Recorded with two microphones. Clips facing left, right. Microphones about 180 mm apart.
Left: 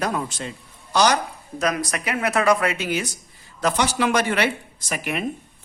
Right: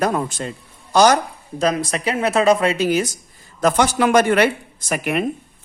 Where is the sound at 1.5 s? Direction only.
30° right (ahead or behind).